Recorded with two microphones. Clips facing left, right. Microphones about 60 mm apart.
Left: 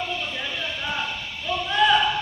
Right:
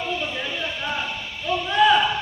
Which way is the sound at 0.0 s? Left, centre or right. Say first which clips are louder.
Right 2 dB; centre.